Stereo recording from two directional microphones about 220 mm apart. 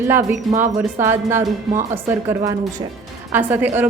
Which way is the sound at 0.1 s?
10° right (ahead or behind).